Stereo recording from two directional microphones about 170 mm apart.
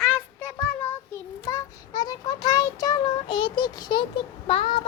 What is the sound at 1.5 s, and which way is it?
Child singing, 20° left (ahead or behind).